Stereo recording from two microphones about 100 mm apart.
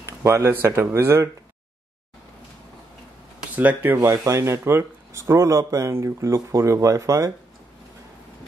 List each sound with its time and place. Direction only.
0.2 s speech: 25° right (ahead or behind)
3.5 s speech: 20° right (ahead or behind)